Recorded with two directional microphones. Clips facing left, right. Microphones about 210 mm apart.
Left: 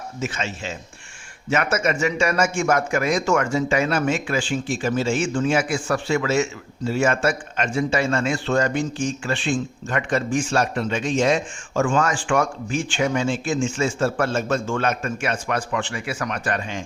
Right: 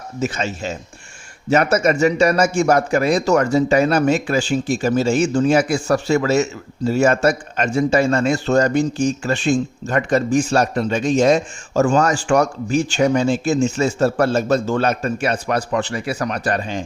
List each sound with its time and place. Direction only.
0.2 s a man's voice: 40° right (ahead or behind)